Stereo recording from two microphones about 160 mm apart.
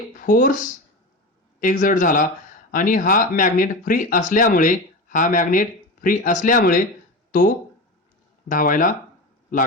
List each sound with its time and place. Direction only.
0.2 s speech: 55° left (ahead or behind)
7.3 s a sound: 65° left (ahead or behind)
8.4 s speech: 60° left (ahead or behind)